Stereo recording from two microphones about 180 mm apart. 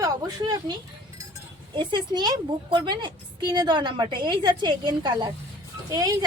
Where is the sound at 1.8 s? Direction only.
25° right (ahead or behind).